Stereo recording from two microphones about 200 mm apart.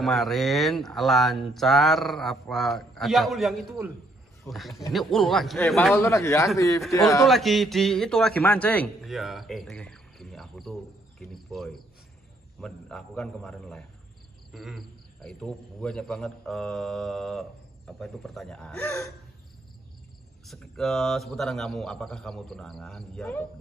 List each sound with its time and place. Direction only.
0.0 s speech: centre (ahead or behind)
5.9 s speech: 15° left (ahead or behind)
7.2 s a man's voice: centre (ahead or behind)
14.5 s frog: centre (ahead or behind)
15.2 s speech: 5° left (ahead or behind)
20.4 s speech: centre (ahead or behind)